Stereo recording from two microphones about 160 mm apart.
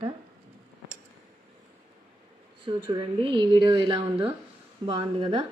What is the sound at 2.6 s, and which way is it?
A woman's voice, 30° right (ahead or behind).